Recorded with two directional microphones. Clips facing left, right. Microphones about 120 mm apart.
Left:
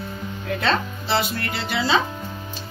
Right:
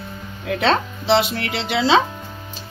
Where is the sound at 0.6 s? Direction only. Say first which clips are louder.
Right 5 dB; 85° right.